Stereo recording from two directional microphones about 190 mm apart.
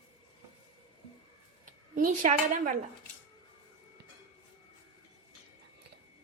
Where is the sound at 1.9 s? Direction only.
45° right (ahead or behind).